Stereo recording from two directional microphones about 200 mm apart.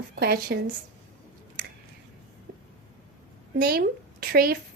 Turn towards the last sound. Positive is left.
turn(degrees=-50)  # may be behind; listen again after turning